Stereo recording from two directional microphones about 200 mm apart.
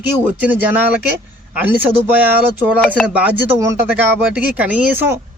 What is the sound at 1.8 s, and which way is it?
Speech, 10° right (ahead or behind).